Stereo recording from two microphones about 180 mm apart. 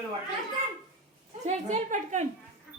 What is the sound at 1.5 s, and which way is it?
Speech, 40° right (ahead or behind).